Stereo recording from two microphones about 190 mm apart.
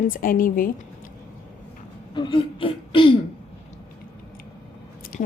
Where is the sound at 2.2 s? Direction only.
25° left (ahead or behind).